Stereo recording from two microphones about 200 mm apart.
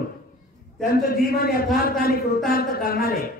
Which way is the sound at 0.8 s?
50° left (ahead or behind).